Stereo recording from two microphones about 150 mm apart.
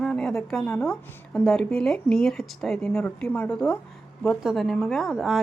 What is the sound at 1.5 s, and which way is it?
A woman's voice, centre (ahead or behind).